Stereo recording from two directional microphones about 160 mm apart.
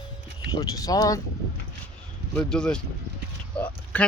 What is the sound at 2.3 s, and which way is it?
Speech, 5° left (ahead or behind).